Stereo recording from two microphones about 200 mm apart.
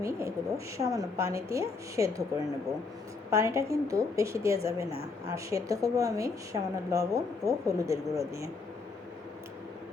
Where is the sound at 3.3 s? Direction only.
15° right (ahead or behind).